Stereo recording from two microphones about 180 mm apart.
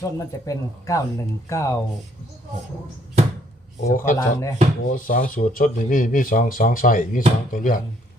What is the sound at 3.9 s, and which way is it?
Speech, 50° left (ahead or behind).